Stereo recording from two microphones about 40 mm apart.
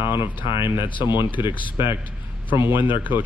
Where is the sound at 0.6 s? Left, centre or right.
Right.